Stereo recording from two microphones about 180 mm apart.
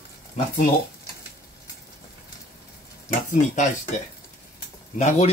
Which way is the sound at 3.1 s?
45° left (ahead or behind).